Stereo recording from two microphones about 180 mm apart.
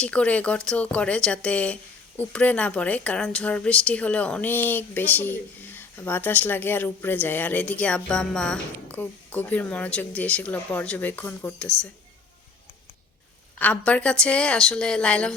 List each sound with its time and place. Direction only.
0.0 s speech: 5° left (ahead or behind)
13.6 s a woman's voice: 10° left (ahead or behind)